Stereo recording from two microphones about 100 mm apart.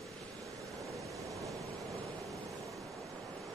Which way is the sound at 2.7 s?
Centre (ahead or behind).